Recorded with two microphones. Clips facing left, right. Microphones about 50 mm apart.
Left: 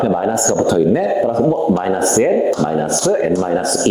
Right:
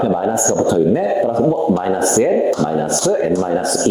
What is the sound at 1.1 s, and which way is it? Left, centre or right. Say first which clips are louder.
Speech: even; centre.